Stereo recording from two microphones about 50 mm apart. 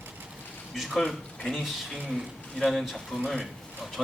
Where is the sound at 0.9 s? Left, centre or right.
Centre.